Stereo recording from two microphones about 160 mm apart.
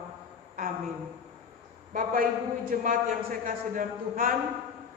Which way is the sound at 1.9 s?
60° right (ahead or behind).